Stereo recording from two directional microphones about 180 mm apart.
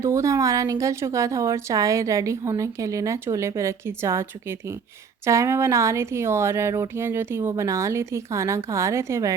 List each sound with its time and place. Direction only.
0.0 s a woman's voice: 15° right (ahead or behind)